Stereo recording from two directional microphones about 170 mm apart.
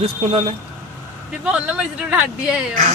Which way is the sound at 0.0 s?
35° right (ahead or behind).